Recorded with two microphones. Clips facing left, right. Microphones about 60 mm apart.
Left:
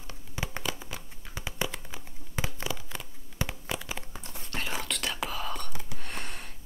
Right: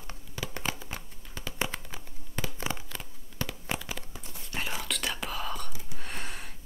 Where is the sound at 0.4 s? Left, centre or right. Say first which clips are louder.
Even; centre.